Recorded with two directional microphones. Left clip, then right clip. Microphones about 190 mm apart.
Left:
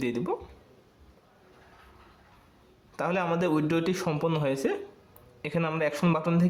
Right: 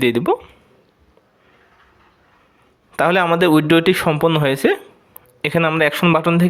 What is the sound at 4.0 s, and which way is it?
Speech, 30° right (ahead or behind).